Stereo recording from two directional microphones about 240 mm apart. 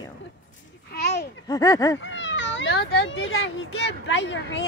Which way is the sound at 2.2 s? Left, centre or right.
Left.